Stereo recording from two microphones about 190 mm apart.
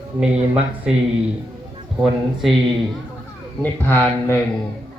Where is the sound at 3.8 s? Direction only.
10° left (ahead or behind).